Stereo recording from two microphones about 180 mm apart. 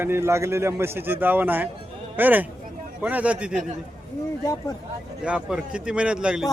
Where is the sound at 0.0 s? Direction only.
15° right (ahead or behind).